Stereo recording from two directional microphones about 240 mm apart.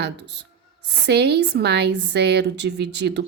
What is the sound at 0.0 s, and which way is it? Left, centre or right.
A woman's voice, right.